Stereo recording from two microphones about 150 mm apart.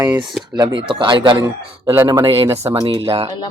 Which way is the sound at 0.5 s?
30° right (ahead or behind).